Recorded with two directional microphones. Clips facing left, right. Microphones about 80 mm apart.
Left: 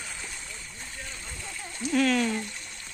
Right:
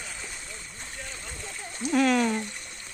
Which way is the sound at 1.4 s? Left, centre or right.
Right.